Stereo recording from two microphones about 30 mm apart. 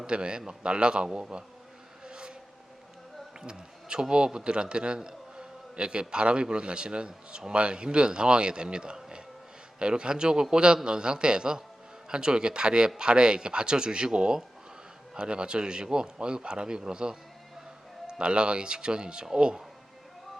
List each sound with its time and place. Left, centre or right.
0.1 s a man's voice: right
2.0 s vehicle: right
3.4 s a man's voice: right